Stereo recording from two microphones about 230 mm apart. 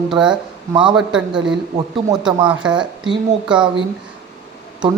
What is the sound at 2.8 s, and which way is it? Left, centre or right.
Speech, centre.